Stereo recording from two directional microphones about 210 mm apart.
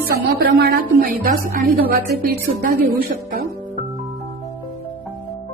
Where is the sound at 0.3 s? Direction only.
45° right (ahead or behind).